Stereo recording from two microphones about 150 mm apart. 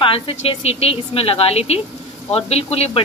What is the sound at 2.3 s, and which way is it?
Dishes, 45° left (ahead or behind).